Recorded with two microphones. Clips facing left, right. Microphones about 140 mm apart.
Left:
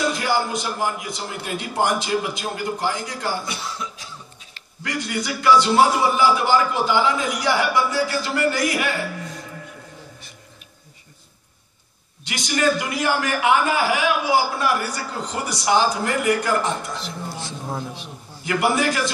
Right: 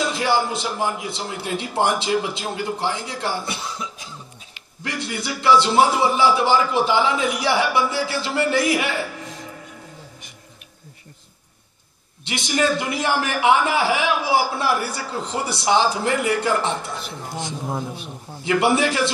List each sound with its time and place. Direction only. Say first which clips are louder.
0.1 s a man's voice: right 1 dB; 25° right (ahead or behind)
4.8 s a man's voice: left 1 dB; 25° right (ahead or behind)
12.3 s a man's voice: even; 25° right (ahead or behind)